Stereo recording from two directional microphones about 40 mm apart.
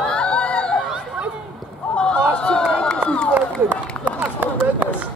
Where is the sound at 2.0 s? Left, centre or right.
Left.